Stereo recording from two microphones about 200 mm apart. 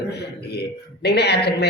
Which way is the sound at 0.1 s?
55° left (ahead or behind).